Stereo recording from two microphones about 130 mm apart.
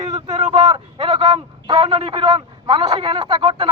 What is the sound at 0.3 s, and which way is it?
A man's voice, 35° right (ahead or behind).